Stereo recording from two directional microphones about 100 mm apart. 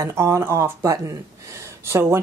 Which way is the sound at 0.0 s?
30° right (ahead or behind).